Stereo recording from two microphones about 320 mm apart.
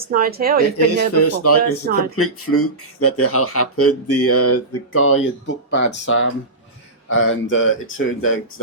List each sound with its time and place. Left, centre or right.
0.1 s speech: right
1.1 s speech: left